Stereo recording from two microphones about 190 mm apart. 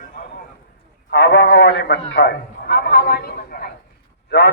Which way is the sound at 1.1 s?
65° left (ahead or behind).